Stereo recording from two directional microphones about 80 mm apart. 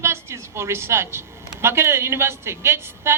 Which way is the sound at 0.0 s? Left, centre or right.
Right.